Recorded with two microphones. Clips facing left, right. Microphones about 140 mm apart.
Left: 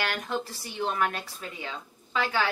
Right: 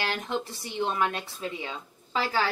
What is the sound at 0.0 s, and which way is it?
Speech, 25° right (ahead or behind).